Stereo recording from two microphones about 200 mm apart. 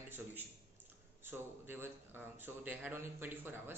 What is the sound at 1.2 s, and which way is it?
A man's voice, 10° right (ahead or behind).